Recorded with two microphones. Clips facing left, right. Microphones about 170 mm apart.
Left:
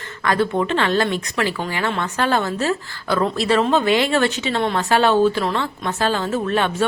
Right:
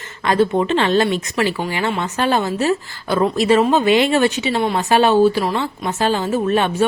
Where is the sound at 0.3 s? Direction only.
20° right (ahead or behind).